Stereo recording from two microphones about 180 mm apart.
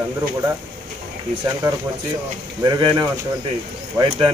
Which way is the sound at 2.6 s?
20° right (ahead or behind).